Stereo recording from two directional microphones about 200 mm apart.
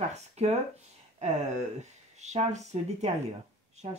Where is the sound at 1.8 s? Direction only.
35° right (ahead or behind).